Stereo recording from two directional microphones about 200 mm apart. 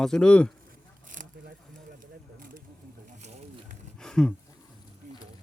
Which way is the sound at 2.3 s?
45° right (ahead or behind).